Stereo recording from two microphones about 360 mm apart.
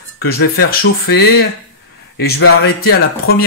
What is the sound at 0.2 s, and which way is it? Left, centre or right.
A man's voice, left.